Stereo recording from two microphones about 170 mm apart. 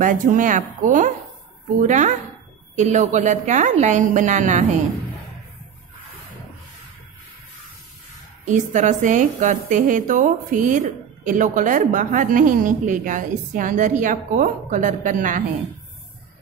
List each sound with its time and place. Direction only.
0.0 s a woman's voice: 50° right (ahead or behind)
8.5 s a woman's voice: 45° right (ahead or behind)